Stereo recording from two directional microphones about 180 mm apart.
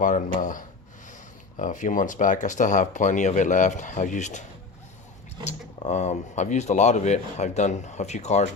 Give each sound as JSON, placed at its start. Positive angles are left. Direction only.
{"t": 0.0, "sound": "speech", "side_deg": 45}
{"t": 5.5, "sound": "speech", "side_deg": 40}